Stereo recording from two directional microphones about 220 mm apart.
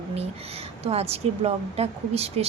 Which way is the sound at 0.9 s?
25° right (ahead or behind).